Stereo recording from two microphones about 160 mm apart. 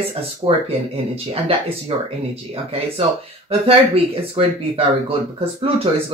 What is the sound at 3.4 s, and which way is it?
Speech, 35° right (ahead or behind).